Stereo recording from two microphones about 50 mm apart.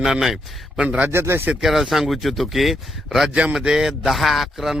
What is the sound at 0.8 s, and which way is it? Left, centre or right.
Speech, right.